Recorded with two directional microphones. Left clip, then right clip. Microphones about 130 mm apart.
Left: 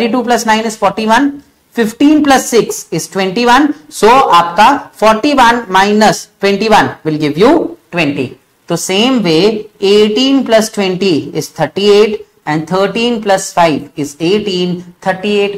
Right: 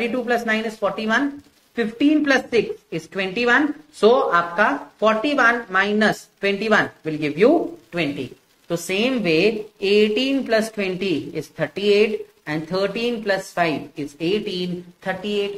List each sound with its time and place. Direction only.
0.0 s speech: 45° left (ahead or behind)
7.9 s a sound: 45° left (ahead or behind)
8.8 s speech: 45° left (ahead or behind)